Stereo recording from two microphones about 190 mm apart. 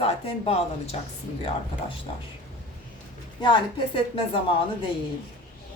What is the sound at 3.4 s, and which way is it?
Speech, 25° left (ahead or behind).